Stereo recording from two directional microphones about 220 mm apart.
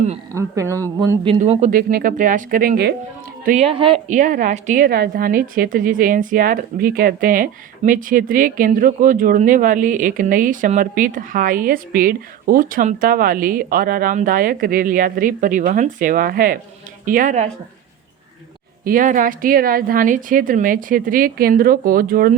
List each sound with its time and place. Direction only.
0.3 s speech: 15° right (ahead or behind)
1.3 s a woman's voice: 30° right (ahead or behind)
3.4 s speech: 30° right (ahead or behind)
4.1 s a woman's voice: 35° right (ahead or behind)
18.9 s a woman's voice: 35° right (ahead or behind)